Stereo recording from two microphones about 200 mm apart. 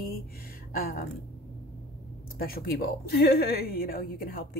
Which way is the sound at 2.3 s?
50° left (ahead or behind).